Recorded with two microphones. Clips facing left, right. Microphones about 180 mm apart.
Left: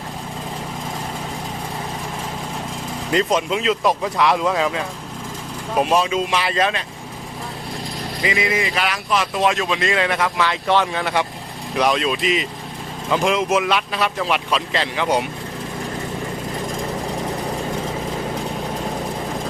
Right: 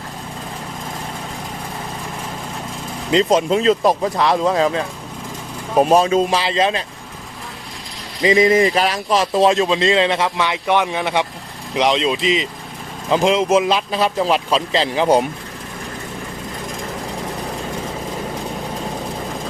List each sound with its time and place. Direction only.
3.1 s a man's voice: 25° right (ahead or behind)
8.2 s a man's voice: 35° right (ahead or behind)